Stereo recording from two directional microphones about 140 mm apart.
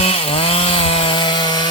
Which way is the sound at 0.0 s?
45° left (ahead or behind).